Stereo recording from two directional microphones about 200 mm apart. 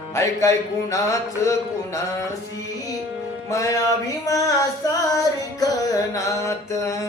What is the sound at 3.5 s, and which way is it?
Singing, 15° left (ahead or behind).